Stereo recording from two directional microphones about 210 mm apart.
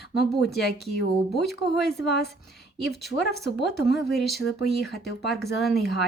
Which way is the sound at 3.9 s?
Centre (ahead or behind).